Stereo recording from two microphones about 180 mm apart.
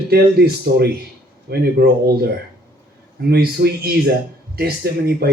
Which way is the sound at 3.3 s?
60° right (ahead or behind).